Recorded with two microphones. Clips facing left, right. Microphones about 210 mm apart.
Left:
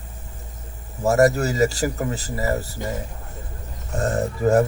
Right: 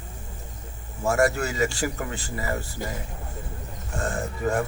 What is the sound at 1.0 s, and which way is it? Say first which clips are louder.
Speech: left 5 dB; 40° left (ahead or behind).